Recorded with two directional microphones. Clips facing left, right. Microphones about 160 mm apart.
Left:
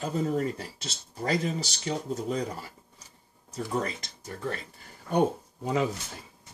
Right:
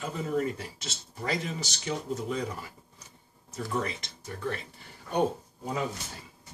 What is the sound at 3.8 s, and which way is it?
Speech, 40° left (ahead or behind).